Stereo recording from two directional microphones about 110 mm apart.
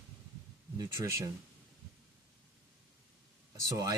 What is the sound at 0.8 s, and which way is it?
Speech, 30° right (ahead or behind).